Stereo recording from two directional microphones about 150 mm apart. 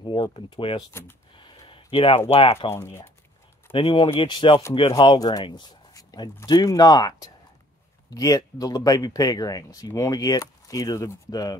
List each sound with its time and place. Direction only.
0.0 s speech: 35° left (ahead or behind)
1.3 s a sound: 35° left (ahead or behind)
2.7 s speech: 15° left (ahead or behind)
3.7 s speech: 35° left (ahead or behind)